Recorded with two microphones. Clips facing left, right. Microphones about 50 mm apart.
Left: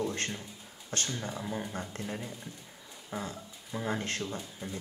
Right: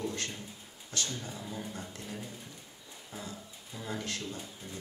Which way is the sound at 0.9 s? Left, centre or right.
Left.